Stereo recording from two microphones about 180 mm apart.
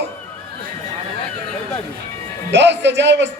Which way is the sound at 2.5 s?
75° right (ahead or behind).